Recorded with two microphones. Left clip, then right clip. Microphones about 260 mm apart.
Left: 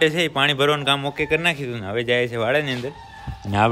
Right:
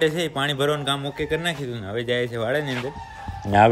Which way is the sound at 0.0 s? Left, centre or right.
Centre.